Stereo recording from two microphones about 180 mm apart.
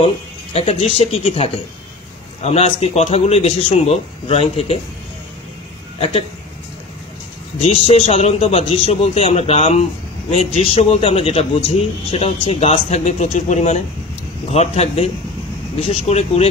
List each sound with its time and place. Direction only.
0.0 s a man's voice: 35° left (ahead or behind)
7.5 s a man's voice: 35° left (ahead or behind)